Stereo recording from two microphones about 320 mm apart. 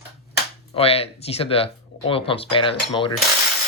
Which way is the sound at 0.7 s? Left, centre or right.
Centre.